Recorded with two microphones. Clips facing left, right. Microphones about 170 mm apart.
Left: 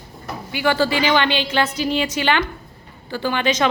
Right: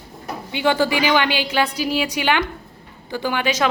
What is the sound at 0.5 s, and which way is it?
A woman's voice, 20° right (ahead or behind).